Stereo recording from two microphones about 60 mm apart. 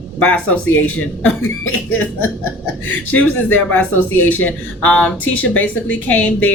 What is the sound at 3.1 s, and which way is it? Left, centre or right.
A woman's voice, left.